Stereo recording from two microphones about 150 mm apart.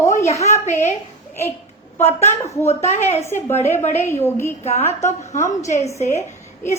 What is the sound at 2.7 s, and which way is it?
Speech, 45° left (ahead or behind).